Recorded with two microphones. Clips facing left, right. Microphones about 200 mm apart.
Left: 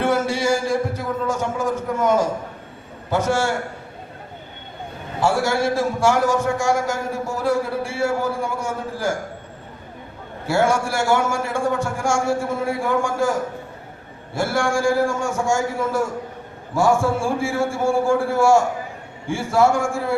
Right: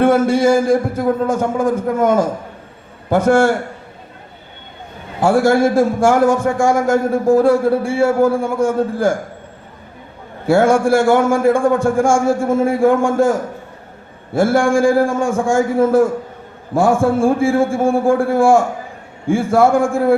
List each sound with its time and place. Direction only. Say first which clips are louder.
0.0 s a man's voice: right 8 dB; 55° right (ahead or behind)
5.2 s a man's voice: right 7 dB; 55° right (ahead or behind)
10.4 s a man's voice: right 7 dB; 55° right (ahead or behind)
14.3 s a man's voice: right 8 dB; 55° right (ahead or behind)